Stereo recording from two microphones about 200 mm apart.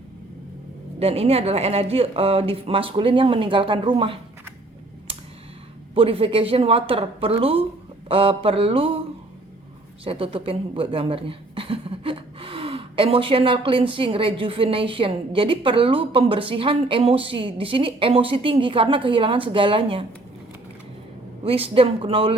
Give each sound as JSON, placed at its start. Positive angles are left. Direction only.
{"t": 0.9, "sound": "speech", "side_deg": -30}
{"t": 5.1, "sound": "computer keyboard", "side_deg": -25}
{"t": 5.9, "sound": "speech", "side_deg": -30}
{"t": 10.0, "sound": "speech", "side_deg": -30}
{"t": 21.4, "sound": "speech", "side_deg": -30}